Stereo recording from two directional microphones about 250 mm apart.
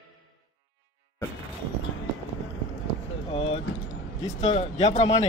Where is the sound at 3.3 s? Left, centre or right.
Left.